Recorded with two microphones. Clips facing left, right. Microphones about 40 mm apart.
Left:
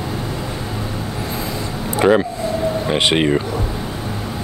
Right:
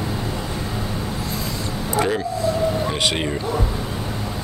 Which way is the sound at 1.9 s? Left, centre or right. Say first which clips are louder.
Left 7 dB; left.